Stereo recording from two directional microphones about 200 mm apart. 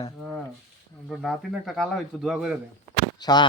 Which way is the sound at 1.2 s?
Centre (ahead or behind).